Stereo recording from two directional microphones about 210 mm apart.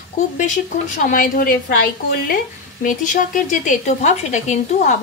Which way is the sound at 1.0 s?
40° left (ahead or behind).